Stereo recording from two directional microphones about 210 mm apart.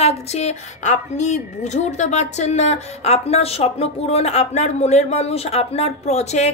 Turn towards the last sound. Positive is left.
turn(degrees=30)  # may be behind; listen again after turning